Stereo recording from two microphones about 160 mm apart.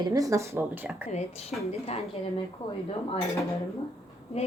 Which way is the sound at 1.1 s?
40° left (ahead or behind).